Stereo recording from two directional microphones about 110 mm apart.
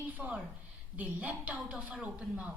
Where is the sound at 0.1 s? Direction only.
15° right (ahead or behind).